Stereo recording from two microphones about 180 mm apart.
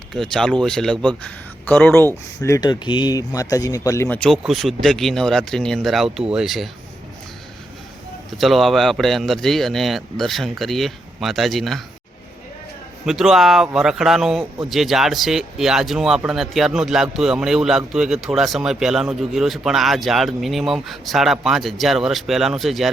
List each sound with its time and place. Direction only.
0.1 s speech: 5° left (ahead or behind)
4.2 s speech: centre (ahead or behind)
8.4 s speech: centre (ahead or behind)
13.1 s speech: centre (ahead or behind)